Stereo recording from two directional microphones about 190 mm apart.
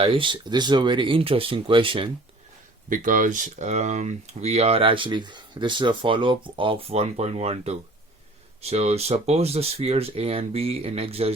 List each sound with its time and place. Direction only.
0.0 s speech: 25° right (ahead or behind)
2.9 s speech: 45° right (ahead or behind)